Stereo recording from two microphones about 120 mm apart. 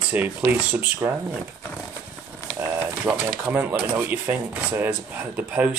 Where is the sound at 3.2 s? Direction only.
10° right (ahead or behind).